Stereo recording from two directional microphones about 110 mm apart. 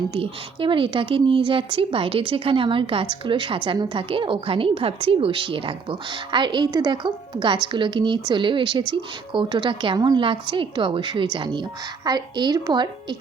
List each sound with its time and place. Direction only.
0.1 s a woman's voice: 55° right (ahead or behind)